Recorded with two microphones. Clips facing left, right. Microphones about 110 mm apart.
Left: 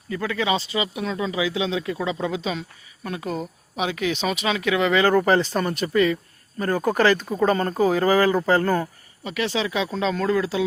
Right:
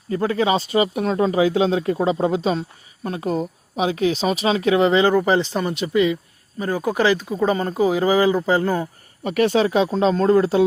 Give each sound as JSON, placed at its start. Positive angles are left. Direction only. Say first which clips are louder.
{"t": 0.1, "sound": "speech", "louder": "right 5 dB", "side_deg": -35}
{"t": 5.0, "sound": "speech", "louder": "right 1 dB", "side_deg": -15}
{"t": 9.2, "sound": "speech", "louder": "right 8 dB", "side_deg": -50}